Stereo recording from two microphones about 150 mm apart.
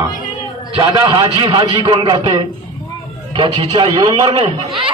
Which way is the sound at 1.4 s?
30° right (ahead or behind).